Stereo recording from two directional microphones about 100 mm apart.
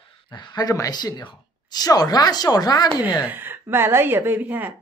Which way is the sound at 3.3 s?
20° right (ahead or behind).